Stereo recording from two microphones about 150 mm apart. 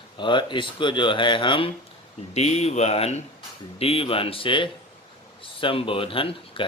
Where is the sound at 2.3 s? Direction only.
45° left (ahead or behind).